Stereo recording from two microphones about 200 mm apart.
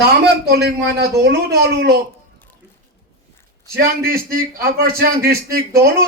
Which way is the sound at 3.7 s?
50° right (ahead or behind).